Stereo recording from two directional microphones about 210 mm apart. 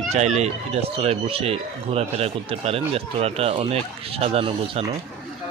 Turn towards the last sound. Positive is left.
turn(degrees=-25)  # may be behind; listen again after turning